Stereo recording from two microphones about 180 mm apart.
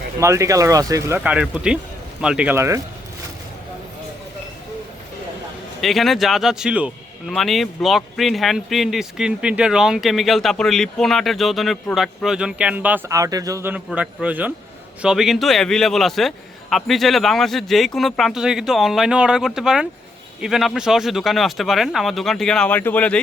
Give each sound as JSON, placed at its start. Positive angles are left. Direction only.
{"t": 0.2, "sound": "speech", "side_deg": -15}
{"t": 5.8, "sound": "speech", "side_deg": 0}